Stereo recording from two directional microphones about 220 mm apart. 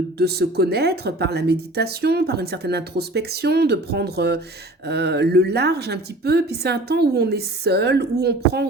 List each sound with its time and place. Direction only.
0.2 s speech: 45° right (ahead or behind)